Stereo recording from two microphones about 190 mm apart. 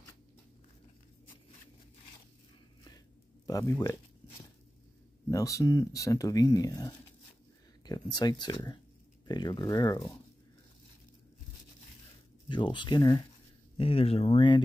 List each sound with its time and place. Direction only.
3.4 s speech: 15° left (ahead or behind)
5.3 s speech: 15° left (ahead or behind)
12.4 s speech: 25° left (ahead or behind)